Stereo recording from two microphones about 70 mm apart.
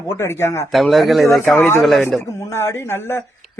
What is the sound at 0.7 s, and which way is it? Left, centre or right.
Speech, centre.